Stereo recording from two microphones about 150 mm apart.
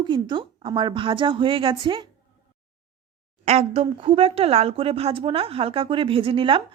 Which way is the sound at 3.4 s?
45° right (ahead or behind).